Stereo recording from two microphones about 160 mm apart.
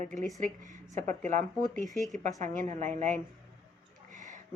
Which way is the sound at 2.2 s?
50° right (ahead or behind).